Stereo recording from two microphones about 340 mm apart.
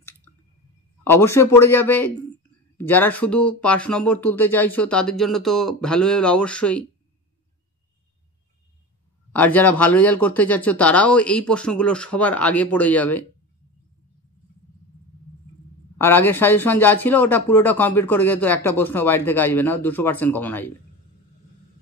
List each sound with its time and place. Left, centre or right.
1.0 s speech: centre
9.3 s speech: centre
16.0 s speech: centre